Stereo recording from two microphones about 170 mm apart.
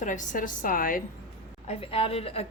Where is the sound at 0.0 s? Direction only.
50° left (ahead or behind).